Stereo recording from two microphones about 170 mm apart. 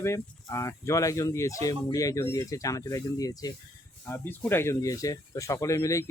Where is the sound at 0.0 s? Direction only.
15° left (ahead or behind).